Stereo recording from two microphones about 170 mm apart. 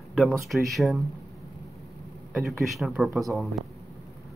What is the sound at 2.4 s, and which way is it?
Speech, centre (ahead or behind).